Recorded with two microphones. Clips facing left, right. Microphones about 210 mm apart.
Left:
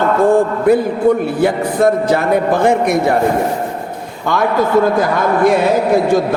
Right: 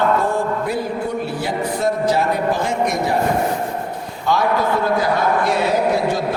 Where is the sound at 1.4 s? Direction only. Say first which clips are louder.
Left 9 dB; 55° left (ahead or behind).